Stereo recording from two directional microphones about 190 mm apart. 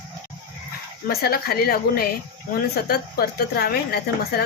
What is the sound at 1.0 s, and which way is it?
A woman's voice, 55° left (ahead or behind).